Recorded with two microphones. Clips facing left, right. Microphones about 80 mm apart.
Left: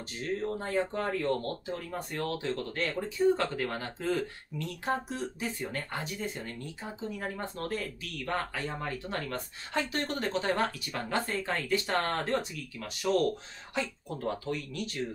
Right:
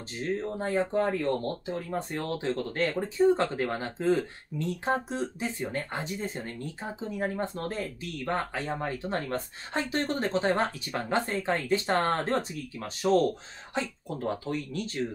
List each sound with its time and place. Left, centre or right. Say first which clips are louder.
0.2 s speech: right 2 dB; right